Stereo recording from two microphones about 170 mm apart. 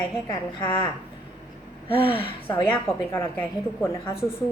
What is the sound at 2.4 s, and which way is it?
A woman's voice, 10° left (ahead or behind).